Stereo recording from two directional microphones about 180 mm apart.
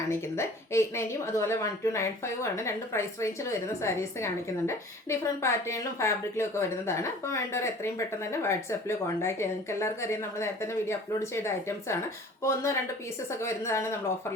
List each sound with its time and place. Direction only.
0.1 s a woman's voice: 15° left (ahead or behind)